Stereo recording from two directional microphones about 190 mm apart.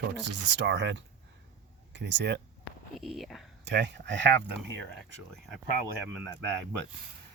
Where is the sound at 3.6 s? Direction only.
70° right (ahead or behind).